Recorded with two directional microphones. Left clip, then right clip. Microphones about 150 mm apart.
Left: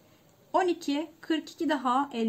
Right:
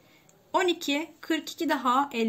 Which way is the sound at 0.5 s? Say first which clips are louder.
Right 1 dB; 45° left (ahead or behind).